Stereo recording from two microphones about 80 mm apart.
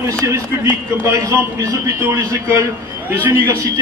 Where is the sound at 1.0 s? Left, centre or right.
Right.